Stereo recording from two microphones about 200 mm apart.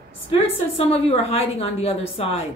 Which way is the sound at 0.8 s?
30° left (ahead or behind).